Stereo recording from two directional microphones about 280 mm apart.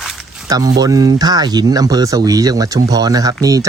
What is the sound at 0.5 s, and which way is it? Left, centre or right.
Speech, centre.